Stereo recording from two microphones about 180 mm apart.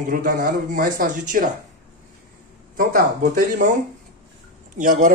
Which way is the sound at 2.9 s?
50° right (ahead or behind).